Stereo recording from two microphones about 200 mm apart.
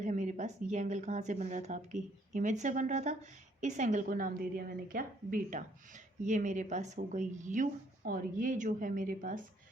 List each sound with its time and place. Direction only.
0.0 s a woman's voice: 40° right (ahead or behind)